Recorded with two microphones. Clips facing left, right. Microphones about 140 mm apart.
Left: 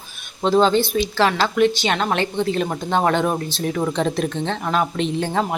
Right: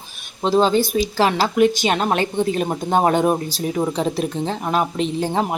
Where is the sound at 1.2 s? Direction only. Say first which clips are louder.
Right 1 dB; 10° right (ahead or behind).